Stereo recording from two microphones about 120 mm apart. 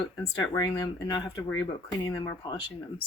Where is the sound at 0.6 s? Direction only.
35° left (ahead or behind).